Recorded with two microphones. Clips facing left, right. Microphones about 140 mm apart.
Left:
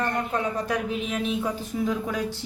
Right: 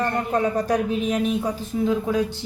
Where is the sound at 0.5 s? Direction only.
40° right (ahead or behind).